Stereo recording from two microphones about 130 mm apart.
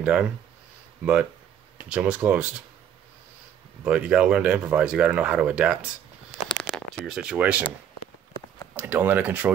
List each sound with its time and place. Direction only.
0.0 s speech: 10° right (ahead or behind)
1.9 s speech: 10° right (ahead or behind)
3.8 s speech: 10° right (ahead or behind)
6.5 s a sound: 5° left (ahead or behind)
8.7 s speech: 15° right (ahead or behind)